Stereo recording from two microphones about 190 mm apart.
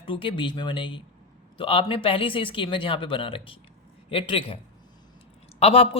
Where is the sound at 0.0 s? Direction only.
25° left (ahead or behind).